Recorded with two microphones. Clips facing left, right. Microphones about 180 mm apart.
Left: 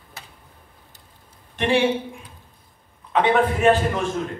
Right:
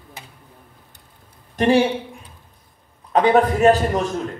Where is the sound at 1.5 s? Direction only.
40° right (ahead or behind).